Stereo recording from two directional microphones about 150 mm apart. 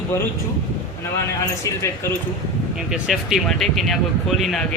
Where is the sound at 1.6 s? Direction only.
20° left (ahead or behind).